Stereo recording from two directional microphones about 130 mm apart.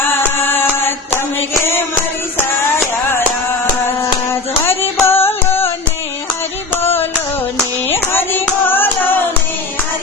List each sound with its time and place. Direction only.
0.0 s chant: 15° left (ahead or behind)
1.4 s music: 20° left (ahead or behind)
4.3 s music: 20° left (ahead or behind)
6.8 s music: 15° left (ahead or behind)
7.9 s child singing: 15° left (ahead or behind)